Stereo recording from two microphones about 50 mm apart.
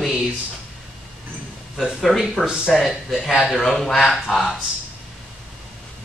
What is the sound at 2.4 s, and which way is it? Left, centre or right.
Speech, centre.